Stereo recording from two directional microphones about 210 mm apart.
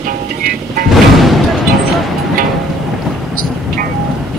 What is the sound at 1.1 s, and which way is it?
Music, centre (ahead or behind).